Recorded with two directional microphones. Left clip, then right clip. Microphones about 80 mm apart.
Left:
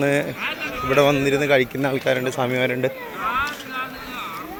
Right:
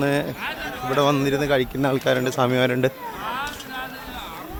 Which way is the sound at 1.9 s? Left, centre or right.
Right.